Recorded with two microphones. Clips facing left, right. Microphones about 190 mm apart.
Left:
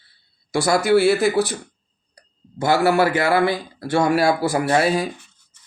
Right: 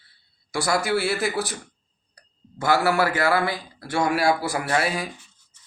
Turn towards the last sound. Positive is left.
turn(degrees=30)  # may be behind; listen again after turning